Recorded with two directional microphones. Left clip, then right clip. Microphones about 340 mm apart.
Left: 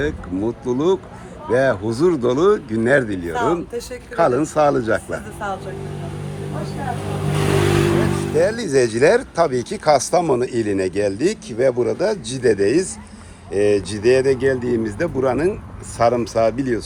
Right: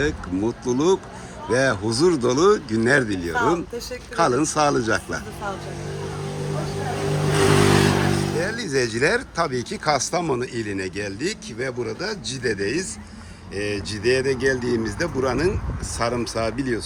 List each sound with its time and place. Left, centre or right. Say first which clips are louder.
0.0 s speech: left 1 dB; centre
7.3 s vehicle: right 1 dB; right
8.4 s speech: left 11 dB; centre